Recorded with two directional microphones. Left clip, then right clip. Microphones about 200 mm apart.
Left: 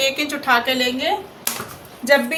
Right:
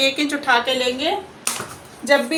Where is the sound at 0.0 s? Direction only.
15° right (ahead or behind).